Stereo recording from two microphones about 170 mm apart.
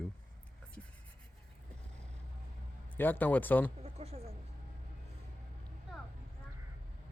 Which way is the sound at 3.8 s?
40° right (ahead or behind).